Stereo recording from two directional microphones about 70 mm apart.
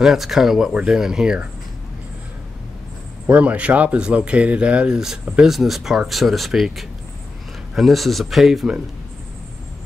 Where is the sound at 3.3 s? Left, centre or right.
Centre.